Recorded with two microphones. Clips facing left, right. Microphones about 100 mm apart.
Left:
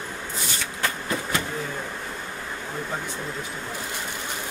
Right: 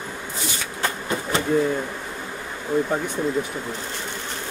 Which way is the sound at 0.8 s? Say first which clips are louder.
Right 2 dB; 25° right (ahead or behind).